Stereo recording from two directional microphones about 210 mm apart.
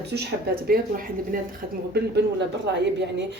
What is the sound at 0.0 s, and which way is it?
Speech, 50° right (ahead or behind).